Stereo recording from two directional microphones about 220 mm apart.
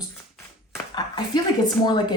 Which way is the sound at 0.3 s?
15° left (ahead or behind).